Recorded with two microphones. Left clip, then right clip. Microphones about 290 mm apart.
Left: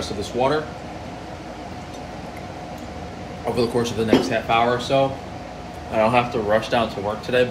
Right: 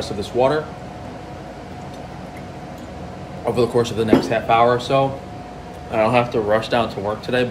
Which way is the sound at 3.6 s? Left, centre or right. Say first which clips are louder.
Right 3 dB; centre.